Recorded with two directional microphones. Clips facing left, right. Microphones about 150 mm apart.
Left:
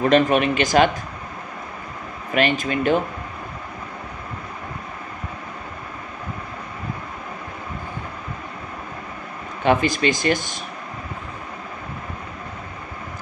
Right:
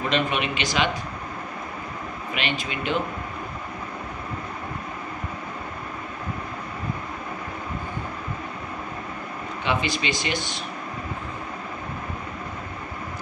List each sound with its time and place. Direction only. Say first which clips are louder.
0.0 s speech: left 8 dB; 45° left (ahead or behind)
2.3 s speech: left 10 dB; 45° left (ahead or behind)
9.6 s speech: left 8 dB; 45° left (ahead or behind)